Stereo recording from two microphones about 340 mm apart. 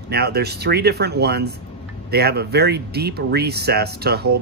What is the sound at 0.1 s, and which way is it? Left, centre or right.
Speech, right.